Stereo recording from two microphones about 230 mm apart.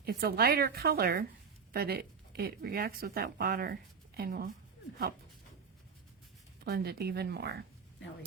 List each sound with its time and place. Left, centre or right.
0.0 s a woman's voice: right
6.7 s a woman's voice: right